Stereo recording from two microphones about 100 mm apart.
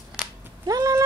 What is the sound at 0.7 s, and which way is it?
Speech, 35° right (ahead or behind).